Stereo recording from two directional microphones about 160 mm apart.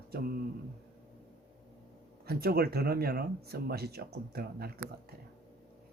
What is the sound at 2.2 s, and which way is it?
Speech, 80° right.